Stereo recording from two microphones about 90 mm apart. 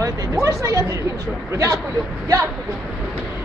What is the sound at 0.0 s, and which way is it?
Speech, 35° right (ahead or behind).